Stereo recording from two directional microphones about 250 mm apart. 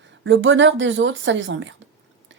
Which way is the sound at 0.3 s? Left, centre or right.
Right.